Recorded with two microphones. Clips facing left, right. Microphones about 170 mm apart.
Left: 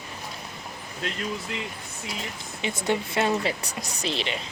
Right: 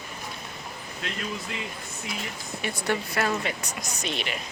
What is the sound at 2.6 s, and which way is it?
Speech, 20° left (ahead or behind).